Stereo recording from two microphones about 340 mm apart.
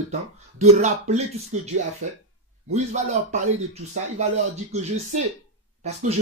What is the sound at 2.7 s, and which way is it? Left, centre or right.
Speech, centre.